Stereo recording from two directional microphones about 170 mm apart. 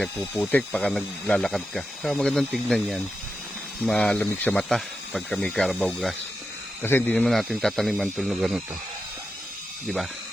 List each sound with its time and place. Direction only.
0.0 s speech: 5° left (ahead or behind)